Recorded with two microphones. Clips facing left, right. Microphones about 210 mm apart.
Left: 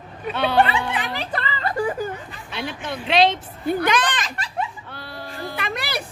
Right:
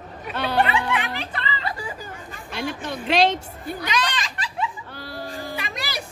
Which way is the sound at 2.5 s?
45° right (ahead or behind).